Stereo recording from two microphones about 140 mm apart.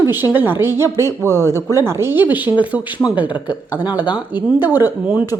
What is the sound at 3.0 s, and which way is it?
Speech, 30° left (ahead or behind).